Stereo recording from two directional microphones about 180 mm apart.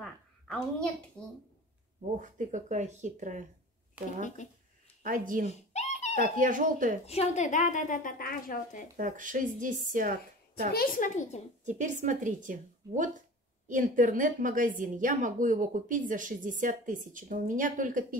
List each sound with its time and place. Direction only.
0.0 s a sound: 5° left (ahead or behind)
2.1 s a woman's voice: 45° right (ahead or behind)
4.0 s speech: 5° right (ahead or behind)
5.0 s a woman's voice: 50° right (ahead or behind)
5.5 s a sound: 40° left (ahead or behind)
6.1 s a woman's voice: 45° right (ahead or behind)
7.1 s a woman's voice: 40° left (ahead or behind)
8.9 s a woman's voice: 45° right (ahead or behind)
10.7 s a woman's voice: 50° left (ahead or behind)
11.6 s a woman's voice: 40° right (ahead or behind)